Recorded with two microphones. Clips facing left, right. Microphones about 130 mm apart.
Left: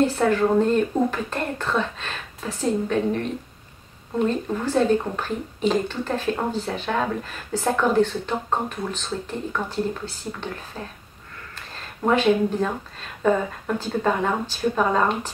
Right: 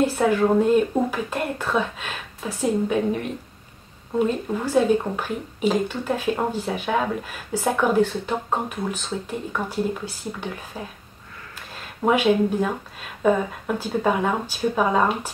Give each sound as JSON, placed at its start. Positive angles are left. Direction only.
{"t": 0.0, "sound": "speech", "side_deg": -10}
{"t": 11.5, "sound": "a sound", "side_deg": -10}
{"t": 13.2, "sound": "speech", "side_deg": -10}